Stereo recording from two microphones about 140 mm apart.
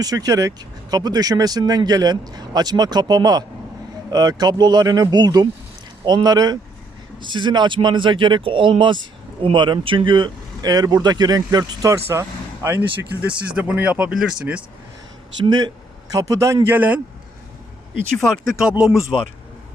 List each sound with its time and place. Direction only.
0.0 s speech: 25° right (ahead or behind); by 14.6 s 5° right (ahead or behind)
15.4 s speech: 30° right (ahead or behind); by 17.0 s 10° right (ahead or behind)
18.2 s speech: centre (ahead or behind)